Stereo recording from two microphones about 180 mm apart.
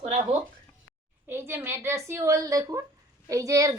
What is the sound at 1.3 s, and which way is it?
A woman's voice, 15° right (ahead or behind).